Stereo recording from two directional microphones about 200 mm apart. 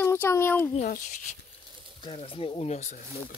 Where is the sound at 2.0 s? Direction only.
25° left (ahead or behind).